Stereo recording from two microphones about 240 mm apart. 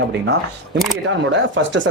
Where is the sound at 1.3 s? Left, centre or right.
Right.